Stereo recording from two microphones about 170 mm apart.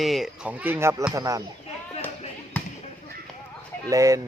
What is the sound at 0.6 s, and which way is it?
Speech, 15° right (ahead or behind).